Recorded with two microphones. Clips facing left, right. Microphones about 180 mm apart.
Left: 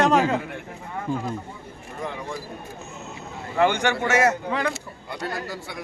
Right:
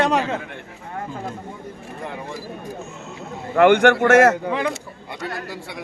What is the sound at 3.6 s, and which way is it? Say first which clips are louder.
Speech: right 8 dB; 60° right (ahead or behind).